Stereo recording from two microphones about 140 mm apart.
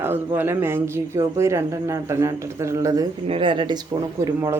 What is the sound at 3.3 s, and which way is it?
Speech, 40° right (ahead or behind).